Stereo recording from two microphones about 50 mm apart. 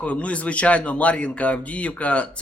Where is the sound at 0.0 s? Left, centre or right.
Left.